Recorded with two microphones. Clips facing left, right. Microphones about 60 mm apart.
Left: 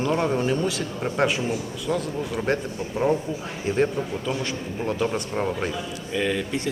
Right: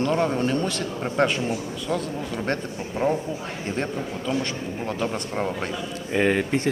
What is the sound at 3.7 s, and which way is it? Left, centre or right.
Speech, centre.